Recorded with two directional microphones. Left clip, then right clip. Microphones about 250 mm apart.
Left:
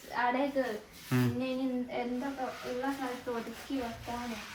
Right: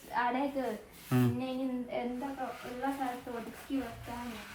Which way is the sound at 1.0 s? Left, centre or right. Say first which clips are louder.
Right 1 dB; centre.